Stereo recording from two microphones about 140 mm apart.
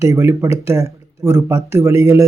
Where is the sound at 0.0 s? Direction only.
20° right (ahead or behind).